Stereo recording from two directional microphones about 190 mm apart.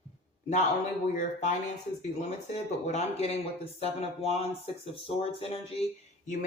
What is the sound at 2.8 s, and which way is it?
Speech, 35° left (ahead or behind).